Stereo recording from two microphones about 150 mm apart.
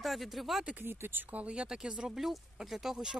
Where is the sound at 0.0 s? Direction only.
Centre (ahead or behind).